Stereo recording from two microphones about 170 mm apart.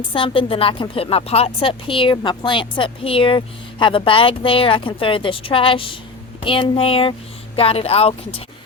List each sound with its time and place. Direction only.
0.1 s speech: 30° left (ahead or behind)